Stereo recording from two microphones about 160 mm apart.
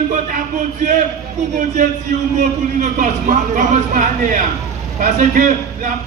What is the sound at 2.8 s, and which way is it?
A man's voice, 55° right (ahead or behind).